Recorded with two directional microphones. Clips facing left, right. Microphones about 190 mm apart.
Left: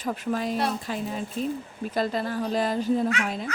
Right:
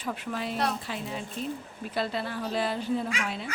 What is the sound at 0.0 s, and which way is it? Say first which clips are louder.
Speech: left 5 dB; 40° left (ahead or behind).